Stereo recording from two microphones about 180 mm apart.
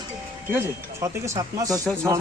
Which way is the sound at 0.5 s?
15° right (ahead or behind).